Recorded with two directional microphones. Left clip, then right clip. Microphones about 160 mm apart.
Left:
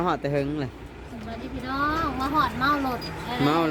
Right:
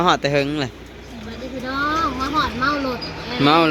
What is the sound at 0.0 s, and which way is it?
Speech, 5° right (ahead or behind).